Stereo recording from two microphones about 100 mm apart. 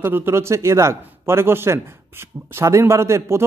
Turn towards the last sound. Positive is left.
turn(degrees=-25)  # may be behind; listen again after turning